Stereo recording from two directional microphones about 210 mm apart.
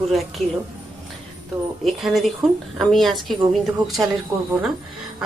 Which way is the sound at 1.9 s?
Centre (ahead or behind).